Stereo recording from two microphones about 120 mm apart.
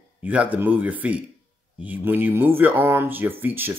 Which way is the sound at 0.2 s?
10° right (ahead or behind).